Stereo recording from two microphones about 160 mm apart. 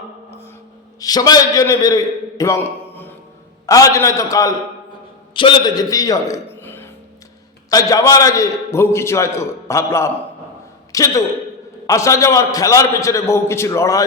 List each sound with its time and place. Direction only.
0.9 s a man's voice: 25° left (ahead or behind)
5.3 s a man's voice: 30° left (ahead or behind)